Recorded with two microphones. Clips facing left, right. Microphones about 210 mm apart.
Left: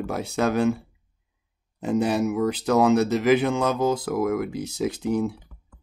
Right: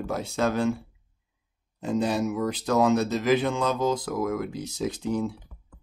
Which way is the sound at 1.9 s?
65° left (ahead or behind).